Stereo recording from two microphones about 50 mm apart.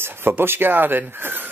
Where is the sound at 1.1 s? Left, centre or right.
Right.